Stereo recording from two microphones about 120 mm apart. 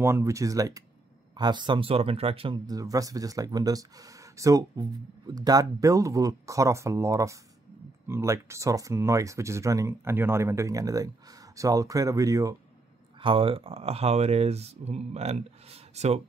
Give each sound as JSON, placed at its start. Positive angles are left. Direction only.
{"t": 0.0, "sound": "speech", "side_deg": -25}
{"t": 2.6, "sound": "speech", "side_deg": -30}
{"t": 13.2, "sound": "speech", "side_deg": -50}